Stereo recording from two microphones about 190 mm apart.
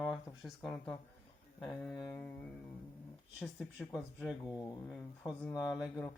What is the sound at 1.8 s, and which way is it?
Speech, centre (ahead or behind).